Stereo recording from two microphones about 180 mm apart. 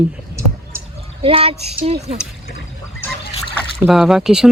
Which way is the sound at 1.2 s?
30° right (ahead or behind).